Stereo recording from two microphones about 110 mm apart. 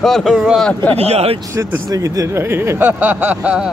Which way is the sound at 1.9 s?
30° right (ahead or behind).